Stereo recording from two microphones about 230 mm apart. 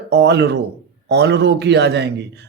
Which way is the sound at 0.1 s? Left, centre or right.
Right.